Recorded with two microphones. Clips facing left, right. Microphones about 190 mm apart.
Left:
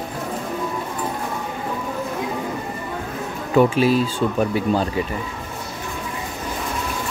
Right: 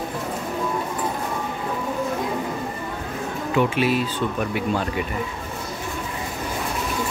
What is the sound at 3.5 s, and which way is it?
Speech, 35° left (ahead or behind).